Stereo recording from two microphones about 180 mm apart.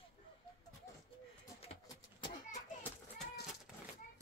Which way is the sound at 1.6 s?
30° left (ahead or behind).